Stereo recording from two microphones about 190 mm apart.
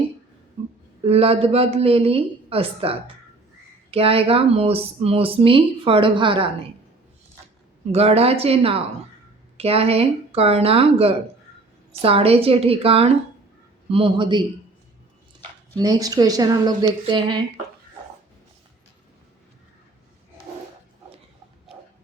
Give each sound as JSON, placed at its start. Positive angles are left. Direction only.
{"t": 1.0, "sound": "a woman's voice", "side_deg": -30}
{"t": 7.9, "sound": "a woman's voice", "side_deg": -30}
{"t": 15.7, "sound": "speech", "side_deg": -20}